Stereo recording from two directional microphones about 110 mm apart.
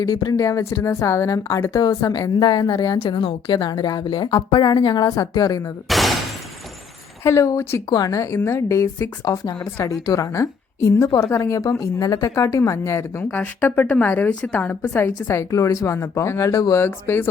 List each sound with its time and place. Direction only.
0.0 s a woman's voice: 40° left (ahead or behind)
5.9 s shatter: centre (ahead or behind)
7.3 s a woman's voice: 30° left (ahead or behind)